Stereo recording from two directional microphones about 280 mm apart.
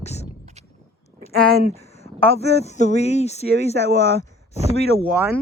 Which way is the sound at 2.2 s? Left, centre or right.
Left.